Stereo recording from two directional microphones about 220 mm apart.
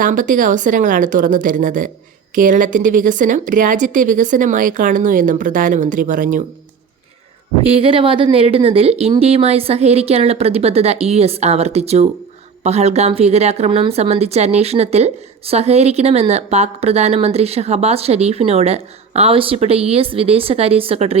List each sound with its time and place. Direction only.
0.0 s a woman's voice: 35° right (ahead or behind)
7.6 s a woman's voice: 25° right (ahead or behind)